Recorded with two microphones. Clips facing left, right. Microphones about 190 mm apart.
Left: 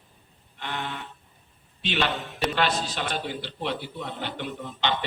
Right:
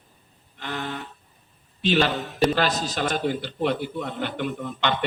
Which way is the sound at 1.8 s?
40° right (ahead or behind).